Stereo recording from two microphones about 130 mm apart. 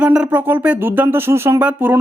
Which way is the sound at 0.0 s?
10° right (ahead or behind).